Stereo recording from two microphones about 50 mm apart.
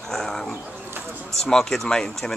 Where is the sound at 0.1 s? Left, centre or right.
Centre.